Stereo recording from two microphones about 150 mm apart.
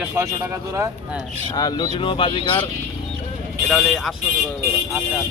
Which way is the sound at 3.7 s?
Centre (ahead or behind).